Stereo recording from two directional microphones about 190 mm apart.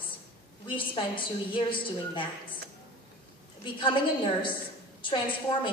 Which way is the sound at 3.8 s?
25° left (ahead or behind).